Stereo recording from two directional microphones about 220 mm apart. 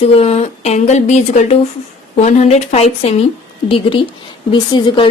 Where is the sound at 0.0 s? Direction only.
25° left (ahead or behind).